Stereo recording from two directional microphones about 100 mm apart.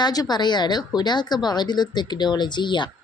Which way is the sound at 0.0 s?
40° left (ahead or behind).